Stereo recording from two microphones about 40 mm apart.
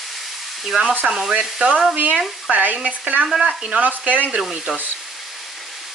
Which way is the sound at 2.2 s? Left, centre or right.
Centre.